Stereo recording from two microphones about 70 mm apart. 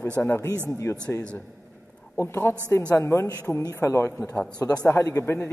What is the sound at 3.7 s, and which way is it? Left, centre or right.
A man's voice, left.